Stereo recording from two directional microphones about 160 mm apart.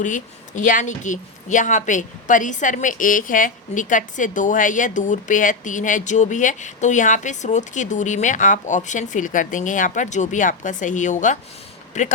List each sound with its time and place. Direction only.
0.0 s a woman's voice: 50° left (ahead or behind)